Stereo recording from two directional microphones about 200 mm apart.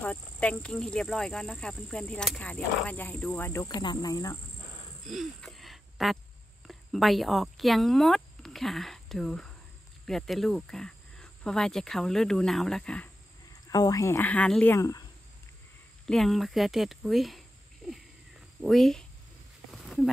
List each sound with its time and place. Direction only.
0.0 s speech: 5° left (ahead or behind)
5.0 s a sound: centre (ahead or behind)
6.7 s speech: centre (ahead or behind)
13.7 s speech: 20° left (ahead or behind)
16.1 s speech: centre (ahead or behind)
18.6 s speech: centre (ahead or behind)
19.7 s a sound: centre (ahead or behind)